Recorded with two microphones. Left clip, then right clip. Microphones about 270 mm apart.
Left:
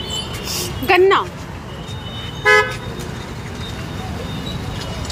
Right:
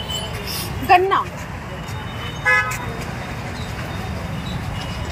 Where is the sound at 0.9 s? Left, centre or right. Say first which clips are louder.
Left 1 dB; centre.